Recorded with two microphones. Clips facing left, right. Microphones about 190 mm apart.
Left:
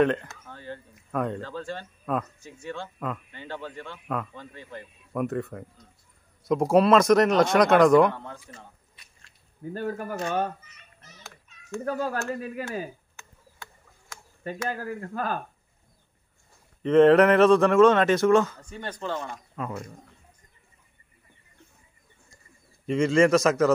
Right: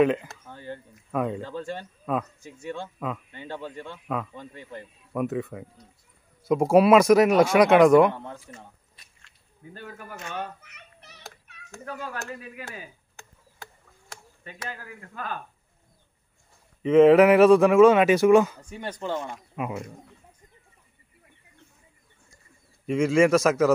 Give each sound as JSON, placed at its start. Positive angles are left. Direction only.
{"t": 0.0, "sound": "a man's voice", "side_deg": -5}
{"t": 1.4, "sound": "speech", "side_deg": -15}
{"t": 2.1, "sound": "a man's voice", "side_deg": 0}
{"t": 2.4, "sound": "a man's voice", "side_deg": -15}
{"t": 4.4, "sound": "speech", "side_deg": -15}
{"t": 5.1, "sound": "a man's voice", "side_deg": 0}
{"t": 9.8, "sound": "speech", "side_deg": 45}
{"t": 10.6, "sound": "children playing", "side_deg": -65}
{"t": 11.5, "sound": "fowl", "side_deg": -65}
{"t": 11.8, "sound": "speech", "side_deg": 40}
{"t": 14.7, "sound": "speech", "side_deg": 45}
{"t": 16.8, "sound": "speech", "side_deg": -5}
{"t": 22.8, "sound": "a man's voice", "side_deg": -5}